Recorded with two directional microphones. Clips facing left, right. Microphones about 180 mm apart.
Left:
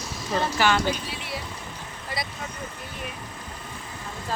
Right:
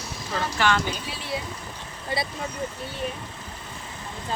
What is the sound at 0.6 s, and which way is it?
Speech, 5° left (ahead or behind).